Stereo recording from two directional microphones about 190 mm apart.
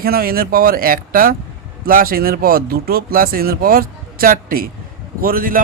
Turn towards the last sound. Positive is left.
turn(degrees=-50)  # may be behind; listen again after turning